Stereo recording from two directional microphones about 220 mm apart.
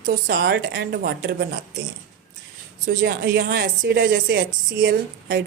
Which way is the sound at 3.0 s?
50° right (ahead or behind).